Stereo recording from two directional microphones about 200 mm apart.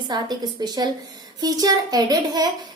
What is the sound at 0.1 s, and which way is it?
A child's voice, 20° right (ahead or behind).